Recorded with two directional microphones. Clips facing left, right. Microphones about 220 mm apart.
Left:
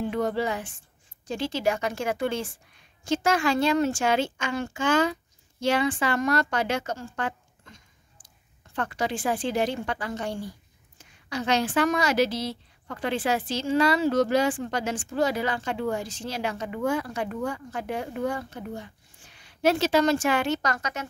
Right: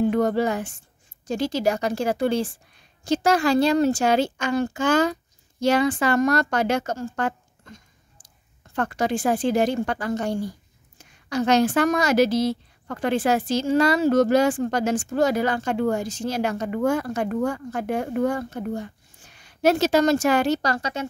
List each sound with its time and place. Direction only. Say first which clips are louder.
0.0 s a woman's voice: right 6 dB; 45° right (ahead or behind); by 21.1 s 30° right (ahead or behind)